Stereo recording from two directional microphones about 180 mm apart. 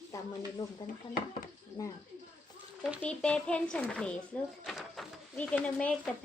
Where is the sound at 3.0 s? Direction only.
5° left (ahead or behind).